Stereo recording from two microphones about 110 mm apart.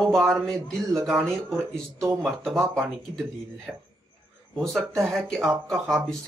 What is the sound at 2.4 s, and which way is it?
Speech, 25° right (ahead or behind).